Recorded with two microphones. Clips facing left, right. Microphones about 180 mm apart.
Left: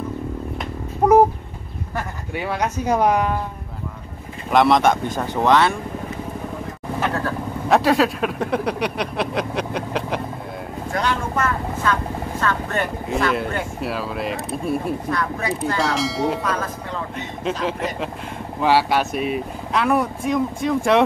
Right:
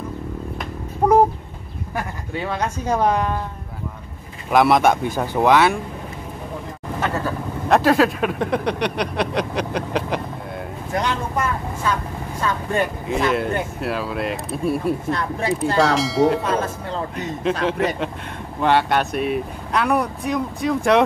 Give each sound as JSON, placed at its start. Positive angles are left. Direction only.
{"t": 1.0, "sound": "a sound", "side_deg": 10}
{"t": 2.3, "sound": "speech", "side_deg": 10}
{"t": 4.5, "sound": "speech", "side_deg": -5}
{"t": 7.0, "sound": "speech", "side_deg": 0}
{"t": 10.9, "sound": "speech", "side_deg": -15}
{"t": 13.1, "sound": "speech", "side_deg": 0}
{"t": 15.0, "sound": "speech", "side_deg": -25}
{"t": 15.8, "sound": "speech", "side_deg": 0}
{"t": 16.4, "sound": "speech", "side_deg": -30}
{"t": 17.1, "sound": "speech", "side_deg": 0}